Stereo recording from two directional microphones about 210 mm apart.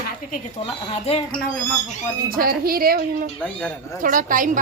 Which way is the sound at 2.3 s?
45° right (ahead or behind).